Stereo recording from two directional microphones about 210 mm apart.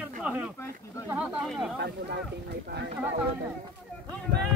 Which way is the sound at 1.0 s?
5° right (ahead or behind).